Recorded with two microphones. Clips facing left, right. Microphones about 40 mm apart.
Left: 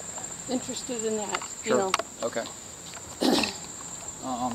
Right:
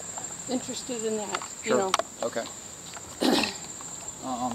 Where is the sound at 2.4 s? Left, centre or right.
Left.